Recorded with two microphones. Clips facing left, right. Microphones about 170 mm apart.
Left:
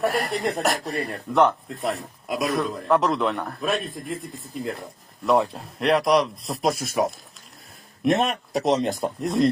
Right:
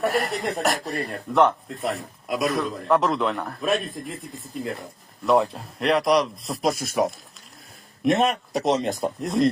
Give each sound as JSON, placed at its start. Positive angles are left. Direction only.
{"t": 0.0, "sound": "speech", "side_deg": 0}
{"t": 8.0, "sound": "speech", "side_deg": 0}